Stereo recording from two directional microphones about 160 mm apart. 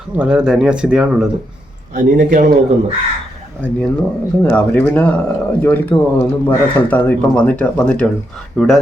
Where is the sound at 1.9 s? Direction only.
50° right (ahead or behind).